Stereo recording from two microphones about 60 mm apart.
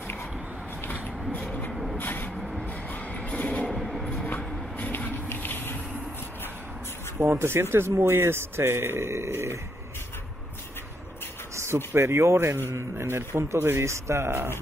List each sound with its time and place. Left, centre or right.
1.7 s vehicle: centre
2.0 s vehicle: left
2.3 s vehicle: centre
2.9 s music: left
3.7 s train: centre
4.4 s a sound: left
4.9 s a sound: left
7.2 s speech: right
11.5 s speech: right